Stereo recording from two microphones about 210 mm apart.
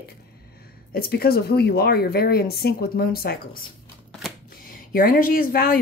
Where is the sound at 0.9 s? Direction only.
45° left (ahead or behind).